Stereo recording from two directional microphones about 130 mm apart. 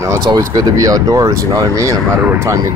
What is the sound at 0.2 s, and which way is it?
Speech, 30° right (ahead or behind).